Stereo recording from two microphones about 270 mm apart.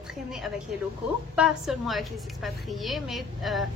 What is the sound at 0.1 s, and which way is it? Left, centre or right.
A woman's voice, centre.